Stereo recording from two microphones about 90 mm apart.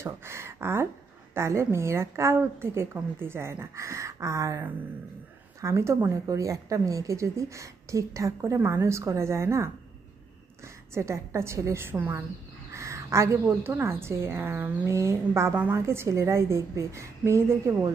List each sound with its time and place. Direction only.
0.0 s a woman's voice: 30° right (ahead or behind)